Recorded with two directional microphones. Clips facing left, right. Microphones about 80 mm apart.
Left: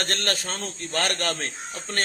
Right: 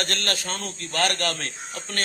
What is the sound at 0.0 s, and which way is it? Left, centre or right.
A man's voice, left.